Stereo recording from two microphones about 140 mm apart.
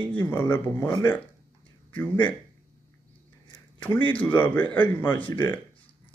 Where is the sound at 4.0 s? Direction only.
40° left (ahead or behind).